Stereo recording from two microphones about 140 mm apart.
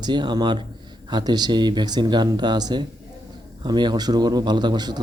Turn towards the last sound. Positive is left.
turn(degrees=-30)  # may be behind; listen again after turning